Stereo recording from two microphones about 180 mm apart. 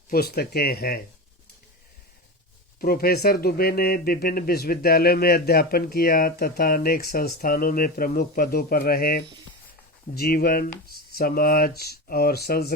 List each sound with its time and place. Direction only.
0.1 s speech: 60° left (ahead or behind)
2.8 s speech: 55° left (ahead or behind)